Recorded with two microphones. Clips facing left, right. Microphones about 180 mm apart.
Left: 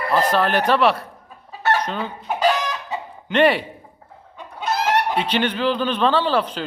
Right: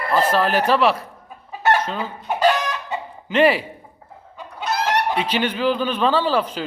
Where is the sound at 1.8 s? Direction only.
Centre (ahead or behind).